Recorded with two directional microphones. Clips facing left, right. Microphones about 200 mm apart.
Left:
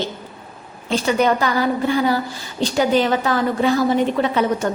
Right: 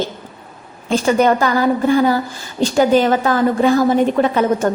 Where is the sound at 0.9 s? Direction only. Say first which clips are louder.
Right 4 dB; 45° right (ahead or behind).